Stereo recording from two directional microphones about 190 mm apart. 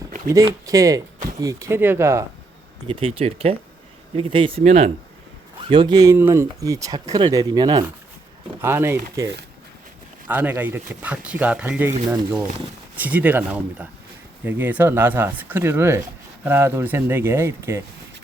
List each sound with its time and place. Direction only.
0.3 s speech: 15° right (ahead or behind)
2.8 s speech: 30° right (ahead or behind); by 9.2 s 10° right (ahead or behind)
10.2 s speech: 10° right (ahead or behind)
13.0 s speech: 10° right (ahead or behind)